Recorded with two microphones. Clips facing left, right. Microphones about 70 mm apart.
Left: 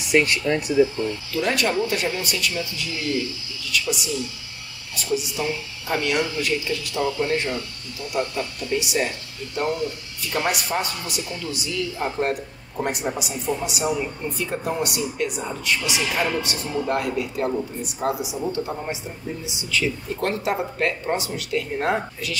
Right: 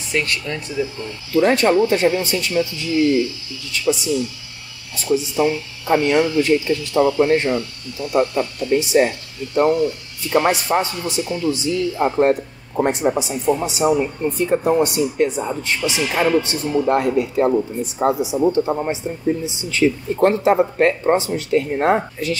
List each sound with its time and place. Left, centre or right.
0.1 s speech: centre
1.3 s speech: right
10.3 s speech: right